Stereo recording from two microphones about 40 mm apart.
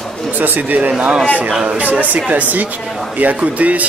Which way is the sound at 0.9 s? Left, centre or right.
Right.